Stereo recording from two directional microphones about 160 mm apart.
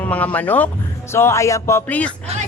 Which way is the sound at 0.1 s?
10° left (ahead or behind).